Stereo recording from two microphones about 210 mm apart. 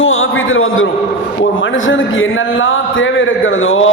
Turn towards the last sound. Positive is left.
turn(degrees=70)  # may be behind; listen again after turning